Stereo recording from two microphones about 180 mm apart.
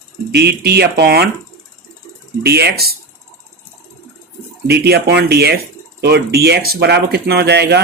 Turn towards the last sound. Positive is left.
turn(degrees=-65)  # may be behind; listen again after turning